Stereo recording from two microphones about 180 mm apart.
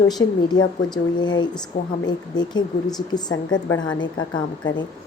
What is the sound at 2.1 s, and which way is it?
A woman's voice, 25° left (ahead or behind).